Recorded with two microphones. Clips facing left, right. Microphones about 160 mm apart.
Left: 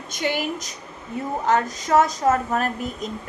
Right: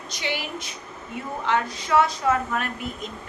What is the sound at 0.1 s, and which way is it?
A woman's voice, 45° left (ahead or behind).